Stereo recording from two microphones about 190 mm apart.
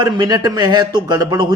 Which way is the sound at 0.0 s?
20° right (ahead or behind).